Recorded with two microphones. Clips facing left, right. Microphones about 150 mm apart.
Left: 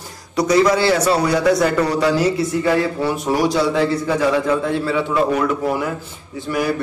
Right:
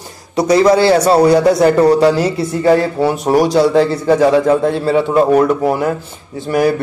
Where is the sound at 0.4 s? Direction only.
30° right (ahead or behind).